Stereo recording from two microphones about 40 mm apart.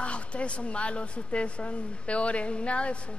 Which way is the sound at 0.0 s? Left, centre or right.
Left.